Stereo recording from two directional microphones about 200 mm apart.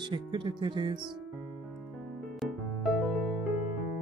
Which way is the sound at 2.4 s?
Centre (ahead or behind).